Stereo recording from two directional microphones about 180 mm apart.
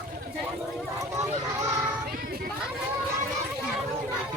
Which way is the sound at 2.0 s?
55° right (ahead or behind).